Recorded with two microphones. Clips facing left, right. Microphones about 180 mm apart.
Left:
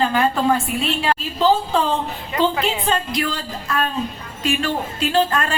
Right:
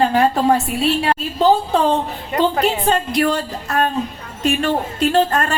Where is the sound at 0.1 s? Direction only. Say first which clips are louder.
Right 3 dB; 35° right (ahead or behind).